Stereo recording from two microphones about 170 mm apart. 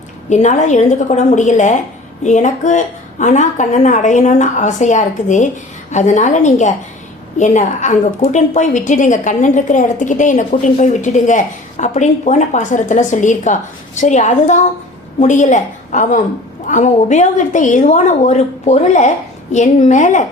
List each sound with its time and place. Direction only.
0.3 s a woman's voice: 45° left (ahead or behind)